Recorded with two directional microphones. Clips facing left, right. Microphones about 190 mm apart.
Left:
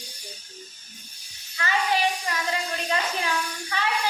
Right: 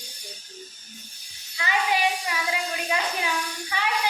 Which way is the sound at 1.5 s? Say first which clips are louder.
Even; 10° right (ahead or behind).